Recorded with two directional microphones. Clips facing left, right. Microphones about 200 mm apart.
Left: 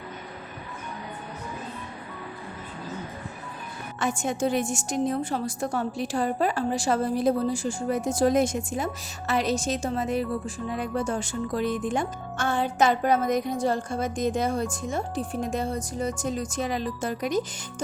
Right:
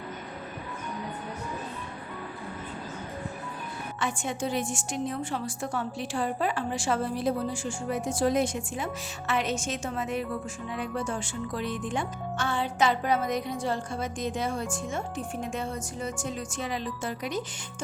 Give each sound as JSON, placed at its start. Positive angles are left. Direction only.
{"t": 4.0, "sound": "a woman's voice", "side_deg": 45}